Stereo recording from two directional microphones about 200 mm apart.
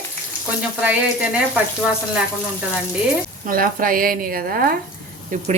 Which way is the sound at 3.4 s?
45° right (ahead or behind).